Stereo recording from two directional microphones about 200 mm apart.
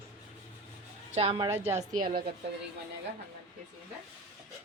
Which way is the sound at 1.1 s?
30° right (ahead or behind).